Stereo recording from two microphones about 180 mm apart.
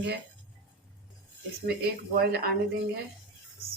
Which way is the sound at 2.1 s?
60° right (ahead or behind).